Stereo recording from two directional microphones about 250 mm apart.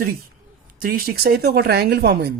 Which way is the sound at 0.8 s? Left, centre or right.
Right.